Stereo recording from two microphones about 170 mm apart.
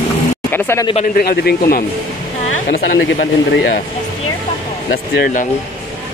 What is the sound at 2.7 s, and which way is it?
Speech, 75° left (ahead or behind).